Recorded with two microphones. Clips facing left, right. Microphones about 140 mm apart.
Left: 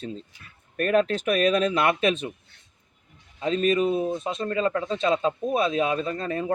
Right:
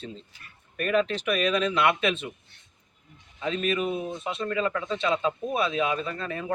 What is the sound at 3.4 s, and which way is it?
Speech, 35° left (ahead or behind).